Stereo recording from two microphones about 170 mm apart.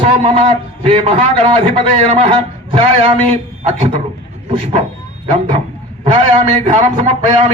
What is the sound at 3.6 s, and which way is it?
Speech, 40° right (ahead or behind).